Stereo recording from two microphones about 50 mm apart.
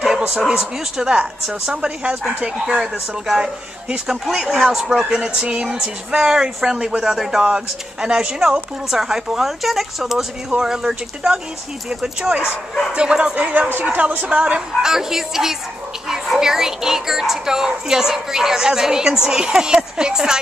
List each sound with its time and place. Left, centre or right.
0.3 s speech: centre